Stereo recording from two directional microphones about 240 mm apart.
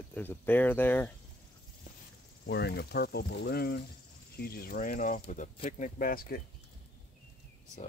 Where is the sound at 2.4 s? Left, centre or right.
Left.